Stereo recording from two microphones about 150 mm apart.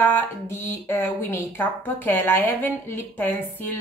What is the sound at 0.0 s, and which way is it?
Speech, 15° left (ahead or behind).